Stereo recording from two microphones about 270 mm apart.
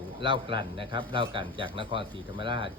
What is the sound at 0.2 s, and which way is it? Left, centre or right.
Speech, centre.